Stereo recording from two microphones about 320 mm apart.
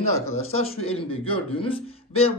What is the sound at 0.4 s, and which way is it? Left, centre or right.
Speech, centre.